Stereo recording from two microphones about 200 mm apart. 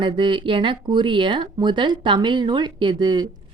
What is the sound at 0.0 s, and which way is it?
Speech, 25° right (ahead or behind).